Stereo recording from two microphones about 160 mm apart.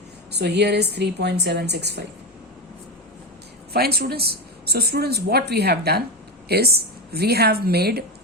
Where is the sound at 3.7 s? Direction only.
75° right (ahead or behind).